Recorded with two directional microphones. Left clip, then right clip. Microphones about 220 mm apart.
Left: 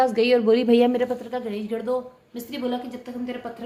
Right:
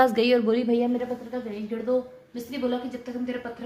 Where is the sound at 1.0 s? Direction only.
40° left (ahead or behind).